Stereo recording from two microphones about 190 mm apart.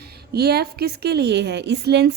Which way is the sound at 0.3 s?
55° right (ahead or behind).